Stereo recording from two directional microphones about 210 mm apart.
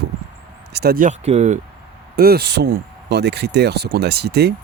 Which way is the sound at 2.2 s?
45° right (ahead or behind).